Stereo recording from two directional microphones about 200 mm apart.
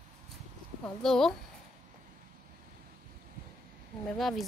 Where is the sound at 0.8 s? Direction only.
5° left (ahead or behind).